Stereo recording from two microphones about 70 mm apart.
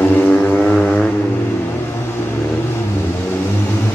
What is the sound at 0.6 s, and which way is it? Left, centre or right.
Vehicle, centre.